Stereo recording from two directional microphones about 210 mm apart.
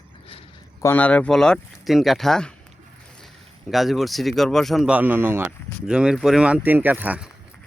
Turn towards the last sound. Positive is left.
turn(degrees=-5)  # may be behind; listen again after turning